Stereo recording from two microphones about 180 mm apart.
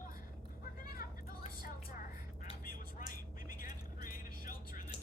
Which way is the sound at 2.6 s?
50° left (ahead or behind).